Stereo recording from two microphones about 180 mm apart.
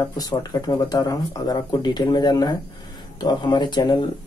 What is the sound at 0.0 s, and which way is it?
Speech, 20° left (ahead or behind).